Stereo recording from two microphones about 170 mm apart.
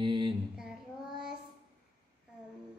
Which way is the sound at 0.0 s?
30° right (ahead or behind).